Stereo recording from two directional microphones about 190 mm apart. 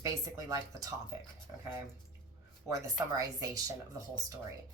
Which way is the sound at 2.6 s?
15° right (ahead or behind).